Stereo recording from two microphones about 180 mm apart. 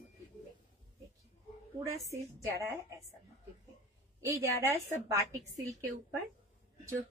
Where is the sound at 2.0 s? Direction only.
15° right (ahead or behind).